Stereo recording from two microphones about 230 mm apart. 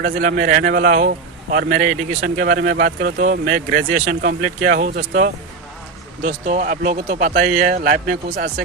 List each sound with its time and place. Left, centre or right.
0.0 s a man's voice: right